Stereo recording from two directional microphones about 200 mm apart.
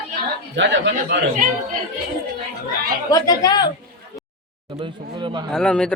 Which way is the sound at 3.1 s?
20° left (ahead or behind).